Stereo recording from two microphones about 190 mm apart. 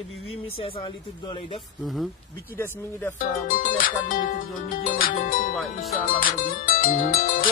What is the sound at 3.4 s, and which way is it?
Music, 45° left (ahead or behind).